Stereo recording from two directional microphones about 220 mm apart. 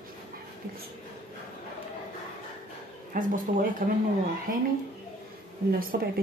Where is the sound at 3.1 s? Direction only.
40° right (ahead or behind).